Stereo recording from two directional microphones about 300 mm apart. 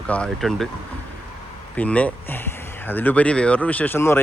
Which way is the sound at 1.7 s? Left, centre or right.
Centre.